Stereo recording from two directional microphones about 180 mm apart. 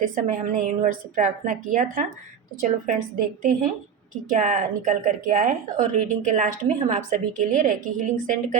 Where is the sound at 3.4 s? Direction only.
50° right (ahead or behind).